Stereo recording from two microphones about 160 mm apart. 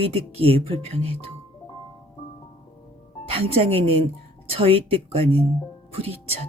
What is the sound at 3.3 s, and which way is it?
A woman's voice, 35° right (ahead or behind).